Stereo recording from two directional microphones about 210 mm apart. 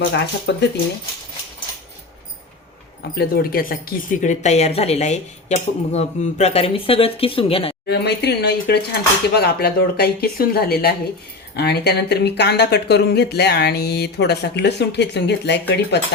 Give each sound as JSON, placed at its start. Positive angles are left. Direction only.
{"t": 0.0, "sound": "speech", "side_deg": 55}
{"t": 3.0, "sound": "speech", "side_deg": 45}
{"t": 7.9, "sound": "speech", "side_deg": 50}